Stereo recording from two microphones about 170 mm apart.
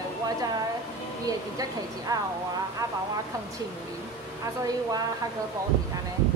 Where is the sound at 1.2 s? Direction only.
20° right (ahead or behind).